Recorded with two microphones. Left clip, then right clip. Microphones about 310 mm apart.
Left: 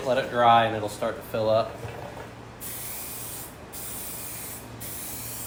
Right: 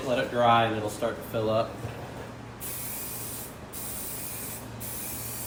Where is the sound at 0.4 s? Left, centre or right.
Left.